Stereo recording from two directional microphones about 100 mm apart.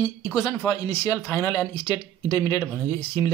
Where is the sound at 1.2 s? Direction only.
30° left (ahead or behind).